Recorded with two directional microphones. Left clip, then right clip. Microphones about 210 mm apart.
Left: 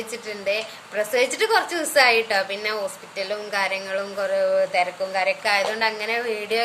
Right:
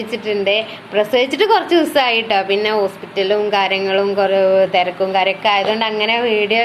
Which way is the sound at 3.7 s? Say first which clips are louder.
Right 11 dB; 15° left (ahead or behind).